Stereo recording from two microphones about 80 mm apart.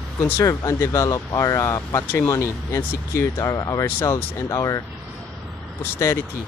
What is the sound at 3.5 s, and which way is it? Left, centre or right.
Speech, left.